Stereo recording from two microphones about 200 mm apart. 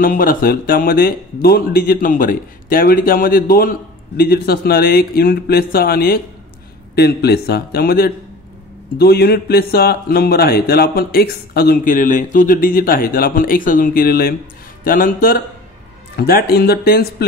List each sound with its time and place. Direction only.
0.0 s speech: 45° left (ahead or behind)